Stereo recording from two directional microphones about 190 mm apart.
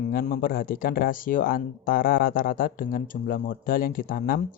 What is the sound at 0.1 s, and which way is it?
Speech, 50° left (ahead or behind).